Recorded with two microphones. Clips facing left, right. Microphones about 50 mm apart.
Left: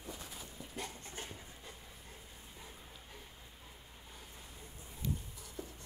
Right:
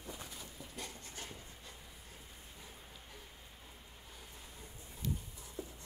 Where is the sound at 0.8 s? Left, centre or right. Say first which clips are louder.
Left 2 dB; left.